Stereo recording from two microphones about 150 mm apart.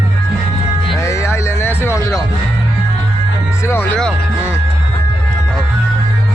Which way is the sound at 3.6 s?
15° left (ahead or behind).